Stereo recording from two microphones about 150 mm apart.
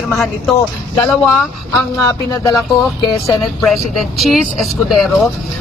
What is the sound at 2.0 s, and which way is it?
Speech, 25° left (ahead or behind).